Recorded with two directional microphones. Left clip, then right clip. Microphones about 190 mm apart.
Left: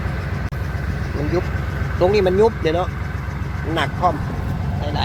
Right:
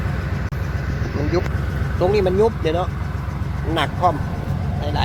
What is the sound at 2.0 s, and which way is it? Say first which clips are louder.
Speech: left 2 dB; 20° left (ahead or behind).